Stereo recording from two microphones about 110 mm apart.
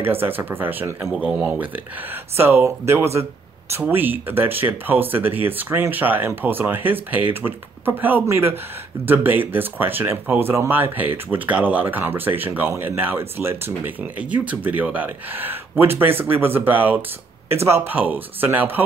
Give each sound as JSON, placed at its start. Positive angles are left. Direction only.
{"t": 0.0, "sound": "speech", "side_deg": -20}
{"t": 1.0, "sound": "speech", "side_deg": 0}
{"t": 1.3, "sound": "speech", "side_deg": -15}